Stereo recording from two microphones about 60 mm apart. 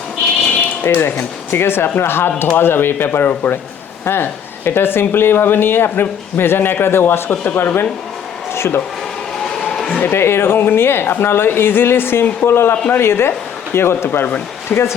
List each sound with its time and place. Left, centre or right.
0.8 s speech: left
9.5 s a sound: centre
10.0 s speech: left
14.7 s speech: left